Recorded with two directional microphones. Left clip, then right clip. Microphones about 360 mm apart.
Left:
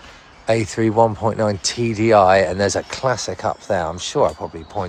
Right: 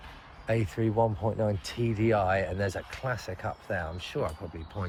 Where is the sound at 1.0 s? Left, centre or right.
Left.